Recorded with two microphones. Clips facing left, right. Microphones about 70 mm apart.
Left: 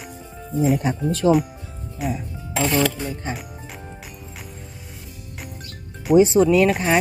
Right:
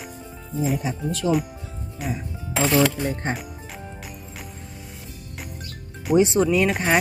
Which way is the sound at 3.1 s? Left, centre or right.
Right.